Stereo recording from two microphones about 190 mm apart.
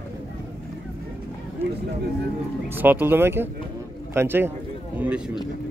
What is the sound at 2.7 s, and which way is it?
Speech, 10° right (ahead or behind).